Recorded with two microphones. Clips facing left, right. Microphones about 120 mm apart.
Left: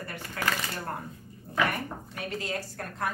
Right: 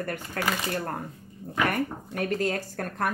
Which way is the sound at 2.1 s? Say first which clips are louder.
Right 6 dB; 50° right (ahead or behind).